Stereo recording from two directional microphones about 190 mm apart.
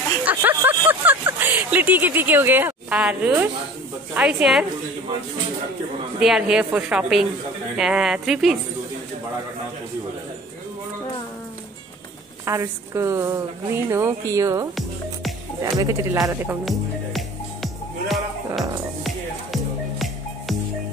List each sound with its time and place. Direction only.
0.2 s a sound: 10° right (ahead or behind)
0.7 s a woman's voice: 10° right (ahead or behind)
6.1 s a woman's voice: 5° right (ahead or behind)
12.4 s speech: 15° right (ahead or behind)
16.6 s music: centre (ahead or behind)